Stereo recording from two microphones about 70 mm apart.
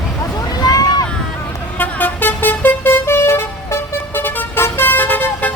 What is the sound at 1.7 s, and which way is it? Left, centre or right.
Vehicle, left.